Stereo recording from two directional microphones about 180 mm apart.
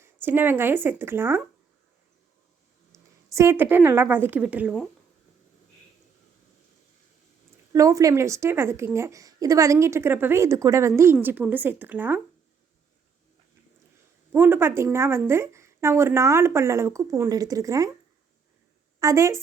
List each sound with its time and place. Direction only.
0.0 s a woman's voice: 10° right (ahead or behind)
3.3 s a woman's voice: 15° right (ahead or behind)
7.7 s a woman's voice: 20° right (ahead or behind)
14.3 s a woman's voice: 10° right (ahead or behind)
18.9 s a woman's voice: 15° right (ahead or behind)